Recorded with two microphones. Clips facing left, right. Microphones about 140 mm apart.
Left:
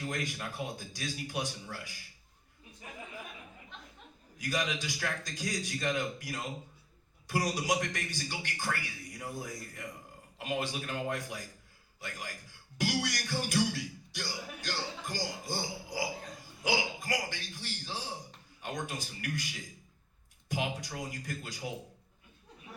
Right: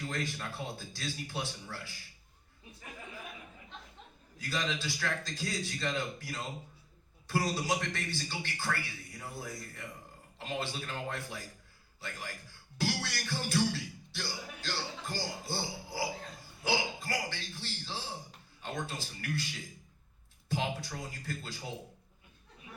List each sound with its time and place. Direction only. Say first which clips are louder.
0.0 s a man's voice: left 1 dB; 15° left (ahead or behind)
4.4 s a man's voice: left 2 dB; 15° left (ahead or behind)
12.7 s a sound: left 2 dB; 15° left (ahead or behind)
16.6 s a man's voice: left 1 dB; 15° left (ahead or behind)
20.5 s a man's voice: even; 15° left (ahead or behind)